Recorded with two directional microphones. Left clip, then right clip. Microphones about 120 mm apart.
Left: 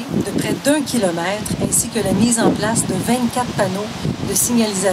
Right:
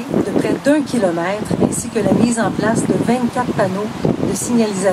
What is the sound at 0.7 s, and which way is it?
Speech, 45° left (ahead or behind).